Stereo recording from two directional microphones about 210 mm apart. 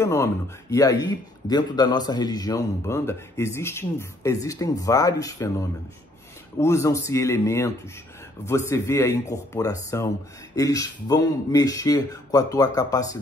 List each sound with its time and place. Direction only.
0.0 s speech: 15° left (ahead or behind)
6.6 s speech: 15° left (ahead or behind)